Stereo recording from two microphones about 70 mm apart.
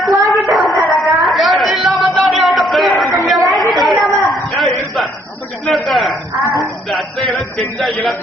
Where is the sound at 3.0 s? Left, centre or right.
Centre.